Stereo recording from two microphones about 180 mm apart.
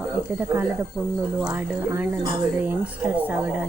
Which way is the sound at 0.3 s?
10° right (ahead or behind).